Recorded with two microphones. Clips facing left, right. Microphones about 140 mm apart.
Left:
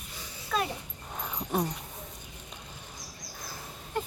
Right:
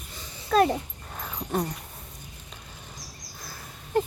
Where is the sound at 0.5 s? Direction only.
50° right (ahead or behind).